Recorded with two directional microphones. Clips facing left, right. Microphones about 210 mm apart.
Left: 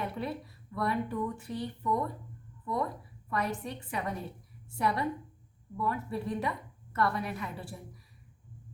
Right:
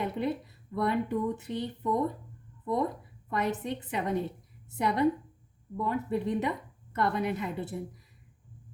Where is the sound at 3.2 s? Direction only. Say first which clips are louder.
Right 3 dB; 20° right (ahead or behind).